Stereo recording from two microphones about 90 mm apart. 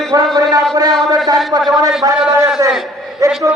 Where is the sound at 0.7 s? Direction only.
45° right (ahead or behind).